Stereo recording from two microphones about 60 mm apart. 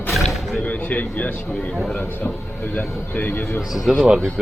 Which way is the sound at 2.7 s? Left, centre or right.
Left.